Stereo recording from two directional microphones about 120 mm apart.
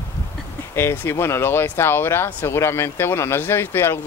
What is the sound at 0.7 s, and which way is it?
Speech, 20° left (ahead or behind).